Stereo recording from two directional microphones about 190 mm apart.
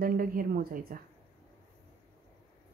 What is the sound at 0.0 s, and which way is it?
A woman's voice, 50° right (ahead or behind).